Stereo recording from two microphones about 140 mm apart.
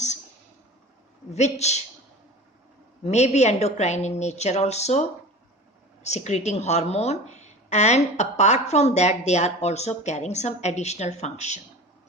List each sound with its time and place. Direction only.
1.3 s a woman's voice: 50° left (ahead or behind)
3.1 s a woman's voice: 55° left (ahead or behind)